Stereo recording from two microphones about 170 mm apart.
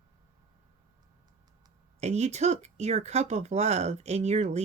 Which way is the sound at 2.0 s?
40° right (ahead or behind).